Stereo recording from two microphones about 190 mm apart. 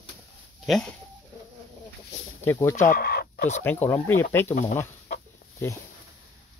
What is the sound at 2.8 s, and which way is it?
Chicken, 50° left (ahead or behind).